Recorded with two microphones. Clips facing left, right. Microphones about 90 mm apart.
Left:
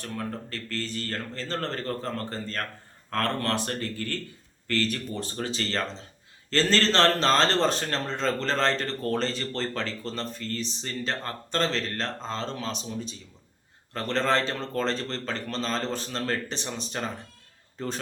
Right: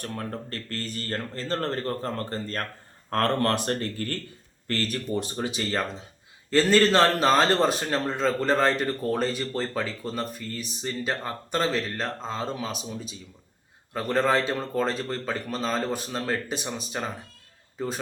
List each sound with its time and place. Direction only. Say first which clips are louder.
0.0 s speech: right 1 dB; 40° right (ahead or behind)
5.1 s a man's voice: right 3 dB; 15° right (ahead or behind)